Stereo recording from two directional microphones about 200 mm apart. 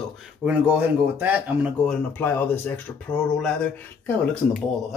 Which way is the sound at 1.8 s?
5° left (ahead or behind).